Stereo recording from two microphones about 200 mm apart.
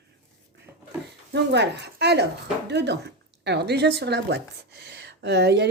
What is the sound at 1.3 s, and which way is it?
Speech, 60° right (ahead or behind).